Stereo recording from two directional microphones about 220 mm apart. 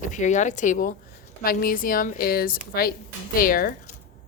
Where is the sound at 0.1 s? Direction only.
35° left (ahead or behind).